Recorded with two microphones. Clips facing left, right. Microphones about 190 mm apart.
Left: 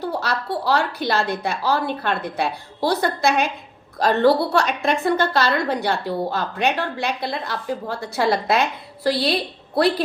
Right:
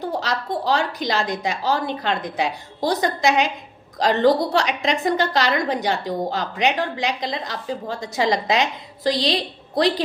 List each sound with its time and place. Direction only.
0.0 s a woman's voice: 15° right (ahead or behind)